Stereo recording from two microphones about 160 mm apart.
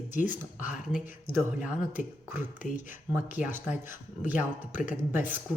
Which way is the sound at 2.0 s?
55° left (ahead or behind).